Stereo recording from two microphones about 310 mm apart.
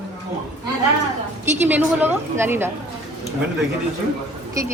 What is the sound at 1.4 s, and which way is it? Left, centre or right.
Speech, centre.